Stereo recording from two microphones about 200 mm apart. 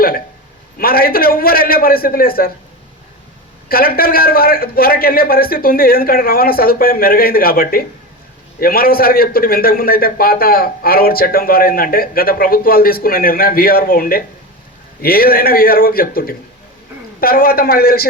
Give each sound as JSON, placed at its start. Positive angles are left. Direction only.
{"t": 0.8, "sound": "a man's voice", "side_deg": 45}
{"t": 3.7, "sound": "a man's voice", "side_deg": 50}